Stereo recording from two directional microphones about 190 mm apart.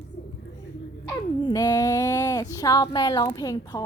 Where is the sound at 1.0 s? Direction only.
15° left (ahead or behind).